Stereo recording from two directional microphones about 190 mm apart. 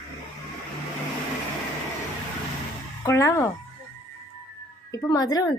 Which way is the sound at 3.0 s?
15° left (ahead or behind).